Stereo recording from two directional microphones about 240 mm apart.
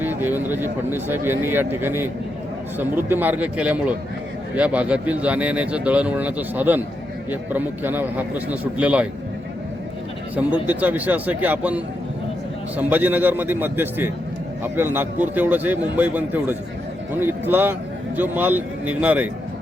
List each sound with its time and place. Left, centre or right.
0.0 s a man's voice: centre
10.7 s a man's voice: centre